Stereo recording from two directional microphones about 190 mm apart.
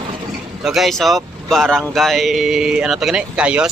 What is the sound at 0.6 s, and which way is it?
Speech, centre (ahead or behind).